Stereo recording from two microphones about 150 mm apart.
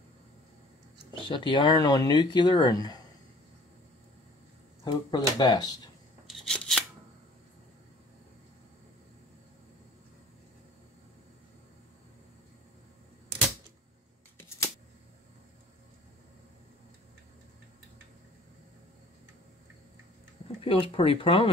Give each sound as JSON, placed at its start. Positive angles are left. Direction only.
{"t": 1.3, "sound": "speech", "side_deg": 30}
{"t": 4.8, "sound": "speech", "side_deg": 30}
{"t": 6.2, "sound": "a sound", "side_deg": 0}
{"t": 20.6, "sound": "speech", "side_deg": 35}